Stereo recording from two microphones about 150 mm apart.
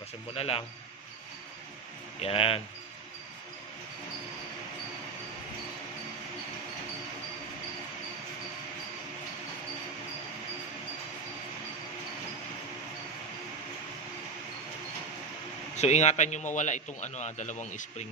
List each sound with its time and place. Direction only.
0.3 s speech: 40° left (ahead or behind)
2.1 s speech: 40° left (ahead or behind)
15.7 s a man's voice: 50° left (ahead or behind)